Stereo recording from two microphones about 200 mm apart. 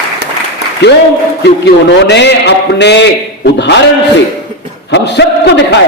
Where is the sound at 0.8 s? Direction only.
55° left (ahead or behind).